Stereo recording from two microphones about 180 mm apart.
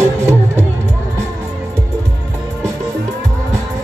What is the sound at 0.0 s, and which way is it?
Music, 15° right (ahead or behind).